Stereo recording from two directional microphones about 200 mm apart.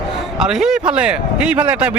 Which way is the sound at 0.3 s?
5° right (ahead or behind).